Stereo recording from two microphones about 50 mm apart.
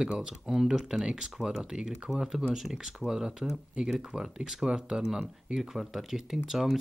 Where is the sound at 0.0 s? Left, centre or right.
Centre.